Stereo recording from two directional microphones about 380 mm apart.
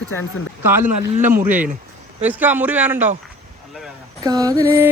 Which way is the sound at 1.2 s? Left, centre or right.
Centre.